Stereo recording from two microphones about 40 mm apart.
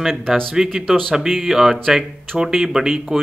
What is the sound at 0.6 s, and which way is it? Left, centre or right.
Speech, centre.